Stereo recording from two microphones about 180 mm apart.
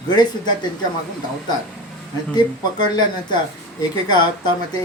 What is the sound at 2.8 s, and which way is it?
Speech, 25° left (ahead or behind).